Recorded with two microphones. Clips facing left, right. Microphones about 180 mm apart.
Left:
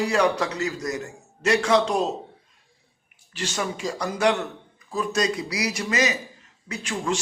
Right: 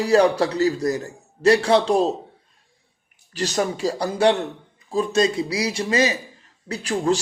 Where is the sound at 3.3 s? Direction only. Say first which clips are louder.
Right 6 dB; 40° right (ahead or behind).